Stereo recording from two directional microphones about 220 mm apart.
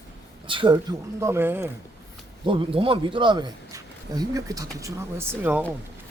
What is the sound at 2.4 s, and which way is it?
A man's voice, 25° right (ahead or behind).